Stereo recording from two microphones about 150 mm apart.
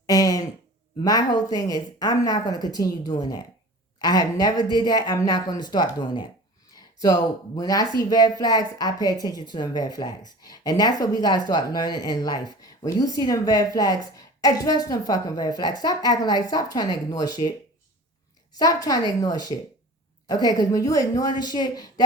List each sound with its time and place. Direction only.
0.0 s a sound: 25° left (ahead or behind)
1.0 s a woman's voice: 25° left (ahead or behind)
18.5 s a woman's voice: 25° left (ahead or behind)